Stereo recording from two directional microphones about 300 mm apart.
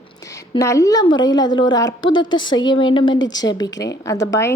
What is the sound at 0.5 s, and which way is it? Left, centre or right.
A woman's voice, centre.